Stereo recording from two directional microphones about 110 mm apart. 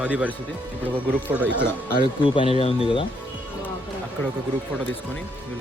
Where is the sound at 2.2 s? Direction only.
55° left (ahead or behind).